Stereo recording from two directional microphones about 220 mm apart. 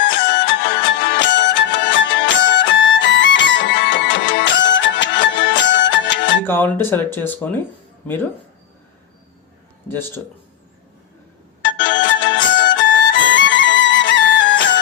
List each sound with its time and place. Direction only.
0.0 s music: 55° left (ahead or behind)
6.4 s speech: 10° left (ahead or behind)
9.9 s speech: 10° left (ahead or behind)
11.8 s music: 55° left (ahead or behind)